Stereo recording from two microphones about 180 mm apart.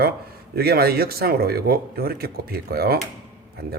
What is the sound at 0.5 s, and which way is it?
A man's voice, 60° right (ahead or behind).